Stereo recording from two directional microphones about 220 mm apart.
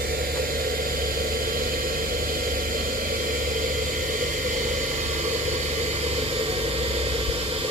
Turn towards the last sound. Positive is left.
turn(degrees=-25)  # may be behind; listen again after turning